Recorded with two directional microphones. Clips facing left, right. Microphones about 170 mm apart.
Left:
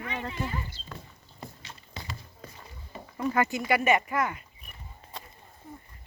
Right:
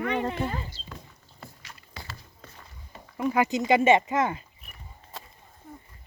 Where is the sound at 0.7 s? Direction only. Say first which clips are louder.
Right 2 dB; 55° left (ahead or behind).